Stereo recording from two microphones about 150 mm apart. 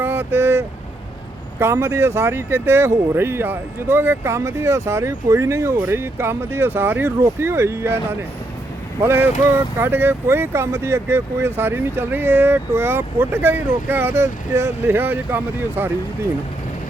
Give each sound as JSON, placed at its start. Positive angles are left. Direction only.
{"t": 0.0, "sound": "speech", "side_deg": -15}
{"t": 9.0, "sound": "speech", "side_deg": -15}